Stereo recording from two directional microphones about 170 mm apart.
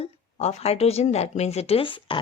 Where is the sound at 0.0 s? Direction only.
40° left (ahead or behind).